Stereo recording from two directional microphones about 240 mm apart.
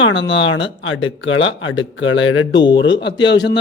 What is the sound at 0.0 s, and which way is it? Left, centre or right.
A woman's voice, left.